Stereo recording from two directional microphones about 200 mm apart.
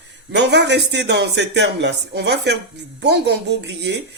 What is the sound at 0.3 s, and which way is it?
Speech, 60° right (ahead or behind).